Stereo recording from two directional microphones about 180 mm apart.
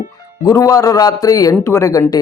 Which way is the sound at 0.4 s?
20° left (ahead or behind).